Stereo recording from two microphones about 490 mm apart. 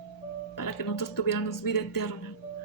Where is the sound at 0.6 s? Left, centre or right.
Left.